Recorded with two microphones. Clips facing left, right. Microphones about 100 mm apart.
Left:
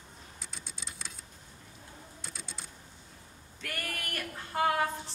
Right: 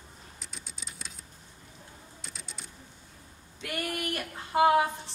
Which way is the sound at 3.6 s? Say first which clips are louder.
Right 6 dB; 20° right (ahead or behind).